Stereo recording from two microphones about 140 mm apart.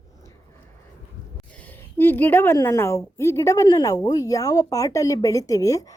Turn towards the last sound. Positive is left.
turn(degrees=25)  # may be behind; listen again after turning